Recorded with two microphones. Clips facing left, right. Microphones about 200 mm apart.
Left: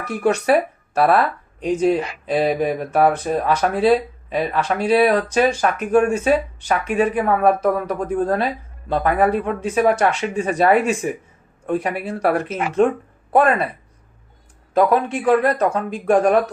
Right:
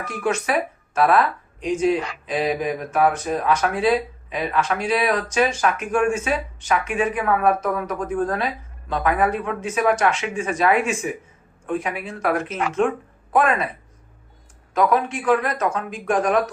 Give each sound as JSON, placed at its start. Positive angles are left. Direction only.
{"t": 0.2, "sound": "speech", "side_deg": 40}
{"t": 14.7, "sound": "speech", "side_deg": 35}